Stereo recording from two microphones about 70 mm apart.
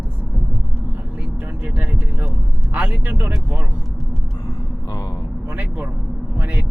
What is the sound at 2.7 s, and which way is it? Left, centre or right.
Speech, centre.